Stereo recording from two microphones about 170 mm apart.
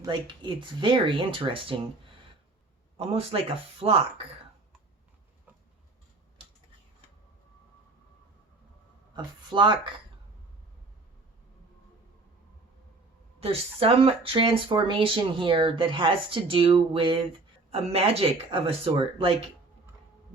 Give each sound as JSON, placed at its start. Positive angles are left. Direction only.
{"t": 0.0, "sound": "speech", "side_deg": -30}
{"t": 3.0, "sound": "speech", "side_deg": -35}
{"t": 9.1, "sound": "speech", "side_deg": -25}
{"t": 13.4, "sound": "speech", "side_deg": -35}